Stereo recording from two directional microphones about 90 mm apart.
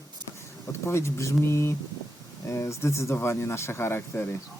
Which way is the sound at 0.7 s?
30° left (ahead or behind).